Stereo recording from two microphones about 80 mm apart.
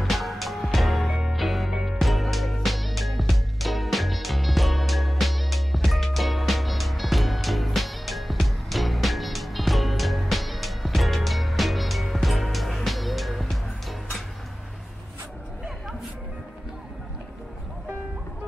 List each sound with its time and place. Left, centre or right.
0.0 s music: centre